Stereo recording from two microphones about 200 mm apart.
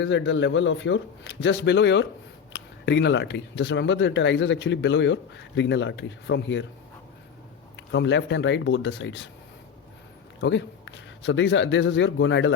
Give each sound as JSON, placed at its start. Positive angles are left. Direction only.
{"t": 0.0, "sound": "speech", "side_deg": 65}
{"t": 7.8, "sound": "speech", "side_deg": 65}
{"t": 10.4, "sound": "speech", "side_deg": 65}